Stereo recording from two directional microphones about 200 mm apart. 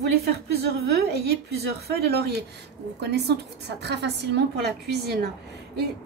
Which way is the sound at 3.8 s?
55° right (ahead or behind).